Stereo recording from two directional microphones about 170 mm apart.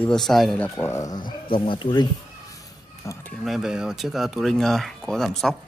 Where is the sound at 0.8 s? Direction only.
15° left (ahead or behind).